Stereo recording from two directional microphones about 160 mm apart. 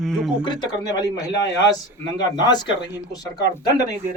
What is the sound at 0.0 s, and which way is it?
Speech, centre (ahead or behind).